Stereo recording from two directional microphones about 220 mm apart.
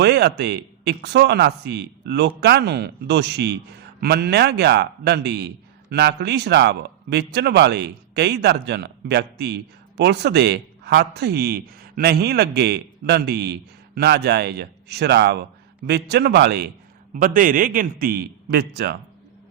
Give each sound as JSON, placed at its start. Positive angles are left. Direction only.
{"t": 0.0, "sound": "a man's voice", "side_deg": -50}